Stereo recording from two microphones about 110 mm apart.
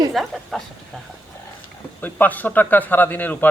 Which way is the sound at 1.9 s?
15° left (ahead or behind).